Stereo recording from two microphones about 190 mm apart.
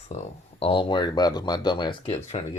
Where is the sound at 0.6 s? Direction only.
25° left (ahead or behind).